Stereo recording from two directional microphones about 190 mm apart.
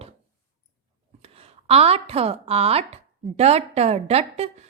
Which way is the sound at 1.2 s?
30° right (ahead or behind).